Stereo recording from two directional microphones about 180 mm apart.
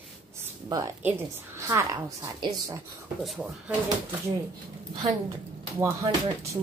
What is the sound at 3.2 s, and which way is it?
Speech, centre (ahead or behind).